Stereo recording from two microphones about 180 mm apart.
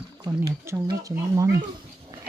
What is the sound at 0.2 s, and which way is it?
Speech, 15° right (ahead or behind).